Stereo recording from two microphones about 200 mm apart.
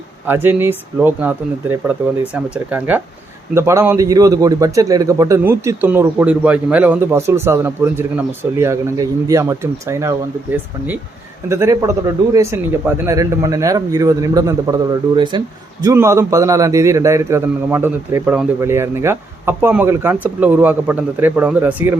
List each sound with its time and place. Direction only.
0.3 s a man's voice: 10° right (ahead or behind)